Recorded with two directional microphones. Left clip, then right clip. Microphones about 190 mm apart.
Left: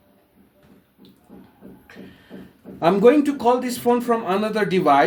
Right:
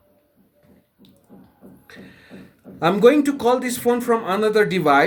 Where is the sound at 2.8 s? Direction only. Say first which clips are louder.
Even; 50° right (ahead or behind).